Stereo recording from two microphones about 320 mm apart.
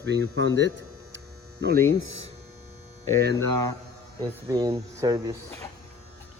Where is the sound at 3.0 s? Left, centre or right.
Right.